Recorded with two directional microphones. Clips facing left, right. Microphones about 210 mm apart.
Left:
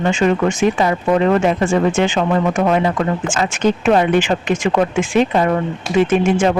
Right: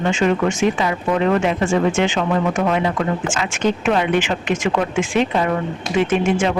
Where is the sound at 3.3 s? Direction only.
35° left (ahead or behind).